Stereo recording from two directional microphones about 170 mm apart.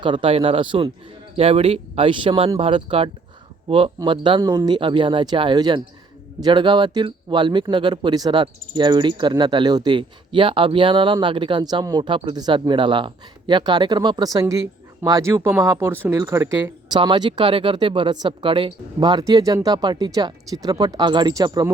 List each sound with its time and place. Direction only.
0.0 s speech: 30° right (ahead or behind)
16.9 s speech: 30° right (ahead or behind)